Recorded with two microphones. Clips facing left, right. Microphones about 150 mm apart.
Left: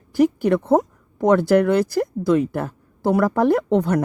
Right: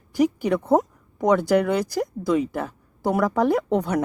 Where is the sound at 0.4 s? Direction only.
Centre (ahead or behind).